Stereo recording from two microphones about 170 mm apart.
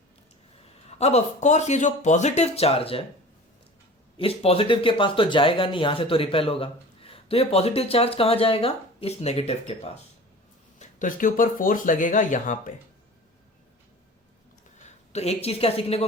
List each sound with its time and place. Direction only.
0.9 s speech: 40° left (ahead or behind)
4.2 s speech: 35° left (ahead or behind)
10.8 s speech: 50° left (ahead or behind)
14.8 s a man's voice: 40° left (ahead or behind)